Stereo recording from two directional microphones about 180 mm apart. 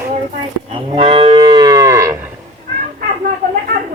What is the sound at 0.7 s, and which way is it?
Moo, 25° right (ahead or behind).